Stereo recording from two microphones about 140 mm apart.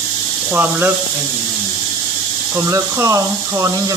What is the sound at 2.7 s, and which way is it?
Speech, 20° right (ahead or behind).